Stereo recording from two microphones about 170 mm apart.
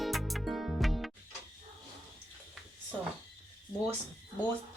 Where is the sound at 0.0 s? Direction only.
Centre (ahead or behind).